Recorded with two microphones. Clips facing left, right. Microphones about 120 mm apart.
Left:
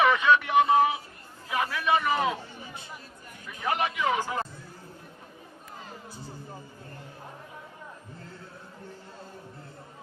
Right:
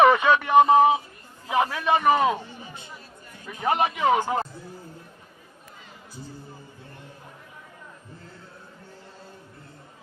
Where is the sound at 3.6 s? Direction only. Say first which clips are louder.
Right 5 dB; 35° right (ahead or behind).